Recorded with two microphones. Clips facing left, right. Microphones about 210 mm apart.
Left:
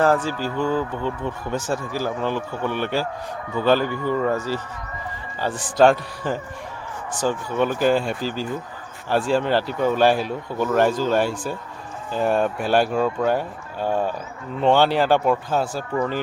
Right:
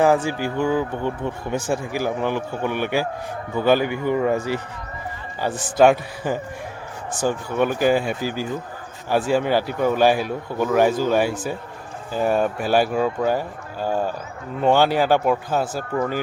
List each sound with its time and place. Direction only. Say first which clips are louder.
0.0 s speech: right 2 dB; 10° right (ahead or behind)
5.7 s speech: right 1 dB; 10° right (ahead or behind)